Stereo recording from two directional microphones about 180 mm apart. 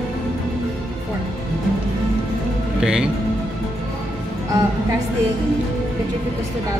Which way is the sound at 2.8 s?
5° right (ahead or behind).